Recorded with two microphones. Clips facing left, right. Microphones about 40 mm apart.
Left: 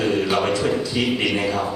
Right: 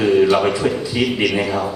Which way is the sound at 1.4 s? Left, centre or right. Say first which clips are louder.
Right 2 dB; centre.